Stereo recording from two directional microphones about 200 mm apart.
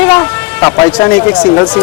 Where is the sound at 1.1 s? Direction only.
5° left (ahead or behind).